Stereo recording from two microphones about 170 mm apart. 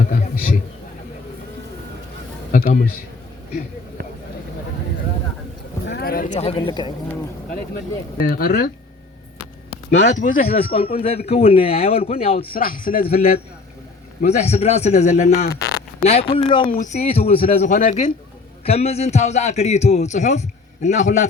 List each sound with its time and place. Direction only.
0.0 s a man's voice: 55° left (ahead or behind)
2.5 s a sound: 55° left (ahead or behind)
5.8 s a sound: 75° left (ahead or behind); by 6.9 s 25° left (ahead or behind)
8.2 s speech: 60° left (ahead or behind)
10.1 s a man's voice: 50° left (ahead or behind)
10.5 s a man's voice: 35° left (ahead or behind)
12.5 s speech: 55° left (ahead or behind)
13.1 s a man's voice: 35° left (ahead or behind)
16.7 s a man's voice: 45° left (ahead or behind)
17.7 s a man's voice: 50° left (ahead or behind)
18.6 s a man's voice: 35° left (ahead or behind)